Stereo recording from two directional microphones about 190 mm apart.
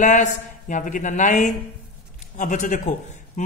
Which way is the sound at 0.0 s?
40° left (ahead or behind).